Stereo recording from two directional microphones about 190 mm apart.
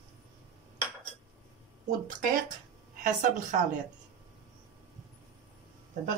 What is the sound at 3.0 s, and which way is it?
Speech, 45° right (ahead or behind).